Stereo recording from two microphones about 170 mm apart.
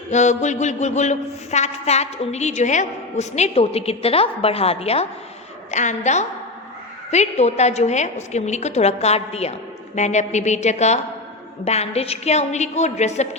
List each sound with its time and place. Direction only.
0.1 s a woman's voice: 45° left (ahead or behind)